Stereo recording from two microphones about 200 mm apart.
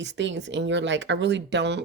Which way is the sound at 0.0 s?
60° right (ahead or behind).